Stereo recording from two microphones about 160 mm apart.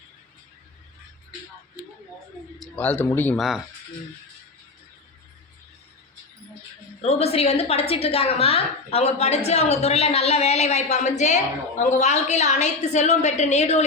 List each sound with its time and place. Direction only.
2.7 s speech: 10° left (ahead or behind)
3.3 s speech: centre (ahead or behind)
7.0 s a woman's voice: 40° left (ahead or behind)